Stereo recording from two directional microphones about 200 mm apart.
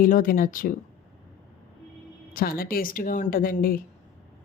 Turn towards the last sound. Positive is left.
turn(degrees=45)  # may be behind; listen again after turning